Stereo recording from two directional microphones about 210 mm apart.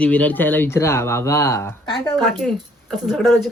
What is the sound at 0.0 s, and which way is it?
Speech, 5° left (ahead or behind).